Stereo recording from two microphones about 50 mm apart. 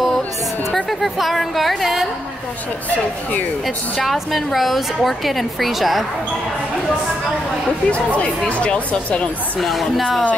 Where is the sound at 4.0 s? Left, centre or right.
Centre.